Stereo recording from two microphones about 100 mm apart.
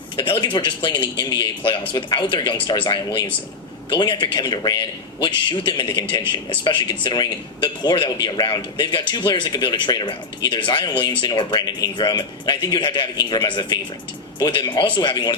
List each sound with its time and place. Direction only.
0.2 s speech: 55° left (ahead or behind)